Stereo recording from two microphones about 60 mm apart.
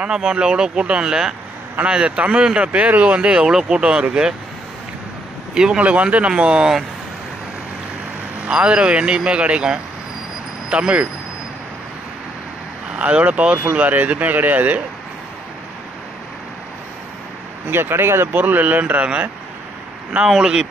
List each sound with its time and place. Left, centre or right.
0.0 s speech: centre
5.5 s speech: centre
5.9 s speech: right
8.5 s speech: centre
13.0 s speech: right
17.6 s speech: right
20.2 s speech: centre